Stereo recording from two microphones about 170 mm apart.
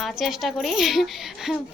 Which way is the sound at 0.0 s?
Centre (ahead or behind).